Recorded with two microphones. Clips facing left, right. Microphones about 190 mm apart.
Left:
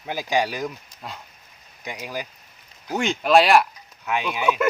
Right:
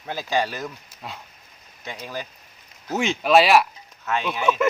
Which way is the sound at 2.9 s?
Centre (ahead or behind).